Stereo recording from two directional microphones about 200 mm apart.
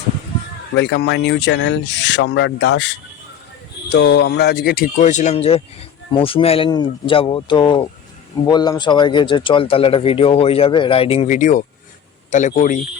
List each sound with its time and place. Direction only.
0.8 s speech: 60° left (ahead or behind); by 12.8 s 40° left (ahead or behind)